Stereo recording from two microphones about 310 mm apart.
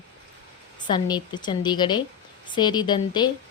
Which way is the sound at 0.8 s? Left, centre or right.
Centre.